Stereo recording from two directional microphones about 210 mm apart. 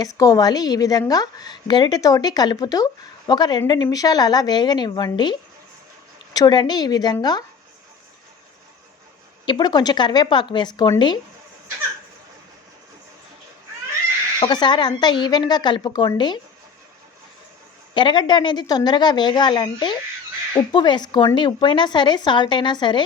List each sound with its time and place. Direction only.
0.0 s a woman's voice: 15° left (ahead or behind)
9.5 s a woman's voice: 20° left (ahead or behind)
14.3 s a woman's voice: 20° left (ahead or behind)
17.9 s a woman's voice: 25° left (ahead or behind)